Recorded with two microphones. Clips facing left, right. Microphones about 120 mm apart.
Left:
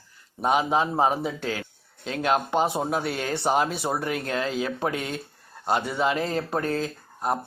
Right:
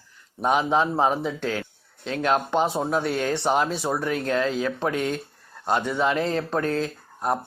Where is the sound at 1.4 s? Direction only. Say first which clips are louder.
Right 2 dB; 45° right (ahead or behind).